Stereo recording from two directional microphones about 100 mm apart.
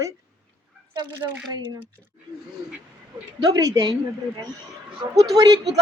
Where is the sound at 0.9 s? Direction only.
50° right (ahead or behind).